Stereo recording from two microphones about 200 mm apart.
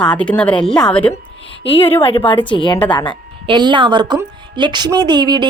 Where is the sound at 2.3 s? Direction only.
25° left (ahead or behind).